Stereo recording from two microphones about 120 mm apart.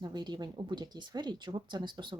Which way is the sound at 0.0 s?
35° right (ahead or behind).